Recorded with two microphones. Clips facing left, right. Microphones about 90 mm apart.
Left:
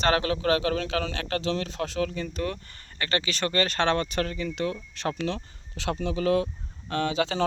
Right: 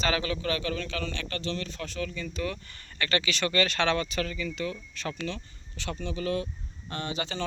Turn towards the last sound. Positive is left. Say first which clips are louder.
# left 7 dB
turn(degrees=90)